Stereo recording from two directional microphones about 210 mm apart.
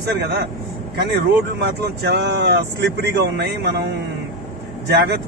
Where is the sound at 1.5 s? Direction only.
55° right (ahead or behind).